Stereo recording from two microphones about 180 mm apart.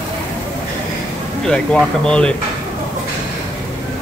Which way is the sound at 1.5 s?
5° left (ahead or behind).